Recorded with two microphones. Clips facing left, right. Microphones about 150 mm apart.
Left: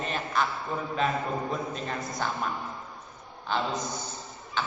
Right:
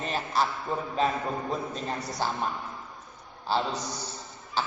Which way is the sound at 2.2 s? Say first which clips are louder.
Right 2 dB; 30° right (ahead or behind).